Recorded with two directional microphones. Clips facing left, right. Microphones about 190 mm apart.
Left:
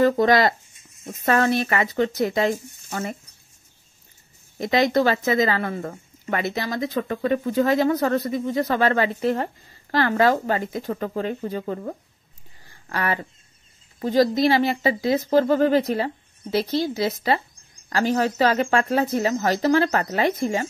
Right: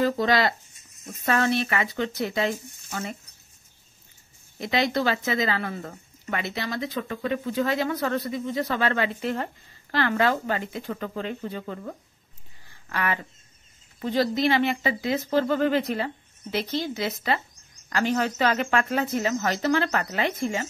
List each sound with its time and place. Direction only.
0.0 s speech: 45° left (ahead or behind)
4.6 s speech: 45° left (ahead or behind)
12.9 s speech: 35° left (ahead or behind)